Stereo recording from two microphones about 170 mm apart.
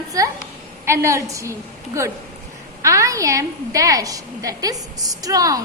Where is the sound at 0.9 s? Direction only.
15° right (ahead or behind).